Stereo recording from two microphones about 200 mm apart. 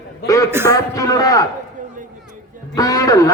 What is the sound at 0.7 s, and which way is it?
Speech, 15° left (ahead or behind).